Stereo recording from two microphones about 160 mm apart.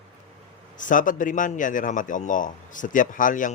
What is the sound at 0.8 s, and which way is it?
A man's voice, 55° left (ahead or behind).